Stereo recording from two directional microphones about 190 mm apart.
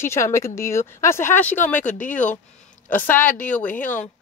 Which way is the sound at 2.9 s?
10° left (ahead or behind).